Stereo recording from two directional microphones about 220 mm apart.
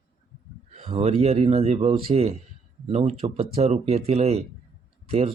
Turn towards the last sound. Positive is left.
turn(degrees=-30)  # may be behind; listen again after turning